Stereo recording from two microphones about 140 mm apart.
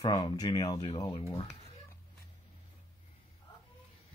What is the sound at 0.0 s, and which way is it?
Speech, 30° left (ahead or behind).